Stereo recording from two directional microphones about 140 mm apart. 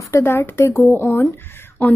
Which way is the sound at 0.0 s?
20° left (ahead or behind).